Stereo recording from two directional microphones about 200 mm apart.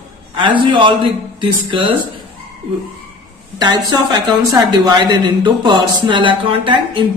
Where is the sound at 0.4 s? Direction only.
25° right (ahead or behind).